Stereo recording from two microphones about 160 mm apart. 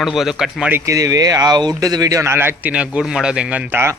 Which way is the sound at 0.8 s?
20° right (ahead or behind).